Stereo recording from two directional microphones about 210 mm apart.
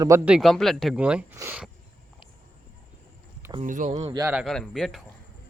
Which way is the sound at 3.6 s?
35° right (ahead or behind).